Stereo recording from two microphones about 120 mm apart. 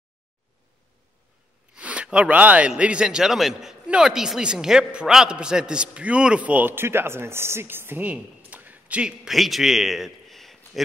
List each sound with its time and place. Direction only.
1.7 s a man's voice: 10° right (ahead or behind)